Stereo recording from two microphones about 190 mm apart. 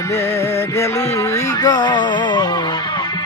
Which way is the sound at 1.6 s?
20° left (ahead or behind).